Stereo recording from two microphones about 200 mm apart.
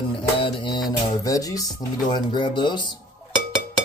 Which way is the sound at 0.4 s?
25° left (ahead or behind).